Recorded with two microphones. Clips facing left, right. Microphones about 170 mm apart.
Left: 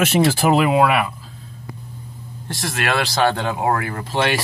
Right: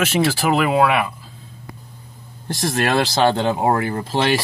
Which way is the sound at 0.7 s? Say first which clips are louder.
Even; 5° left (ahead or behind).